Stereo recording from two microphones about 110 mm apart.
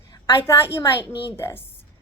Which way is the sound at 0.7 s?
25° left (ahead or behind).